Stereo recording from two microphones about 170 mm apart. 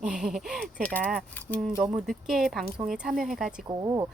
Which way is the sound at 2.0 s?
Centre (ahead or behind).